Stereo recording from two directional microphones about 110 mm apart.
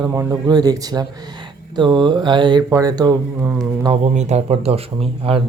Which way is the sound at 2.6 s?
30° right (ahead or behind).